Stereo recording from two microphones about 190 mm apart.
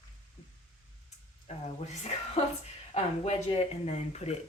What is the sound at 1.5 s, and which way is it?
Speech, 35° left (ahead or behind).